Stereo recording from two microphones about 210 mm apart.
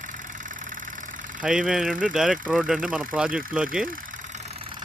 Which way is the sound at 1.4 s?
5° right (ahead or behind).